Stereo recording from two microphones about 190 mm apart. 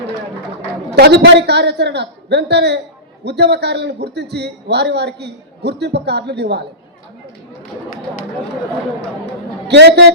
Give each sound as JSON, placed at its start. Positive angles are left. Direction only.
{"t": 0.9, "sound": "a man's voice", "side_deg": -60}
{"t": 9.6, "sound": "a man's voice", "side_deg": -60}